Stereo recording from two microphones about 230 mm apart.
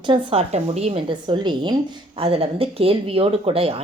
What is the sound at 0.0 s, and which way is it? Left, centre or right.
A woman's voice, right.